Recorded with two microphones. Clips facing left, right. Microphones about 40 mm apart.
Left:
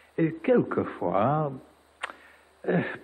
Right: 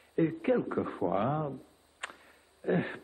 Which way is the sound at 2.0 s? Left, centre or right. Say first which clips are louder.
Left 6 dB; left.